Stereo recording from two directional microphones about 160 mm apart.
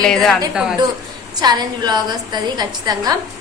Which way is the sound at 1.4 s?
25° right (ahead or behind).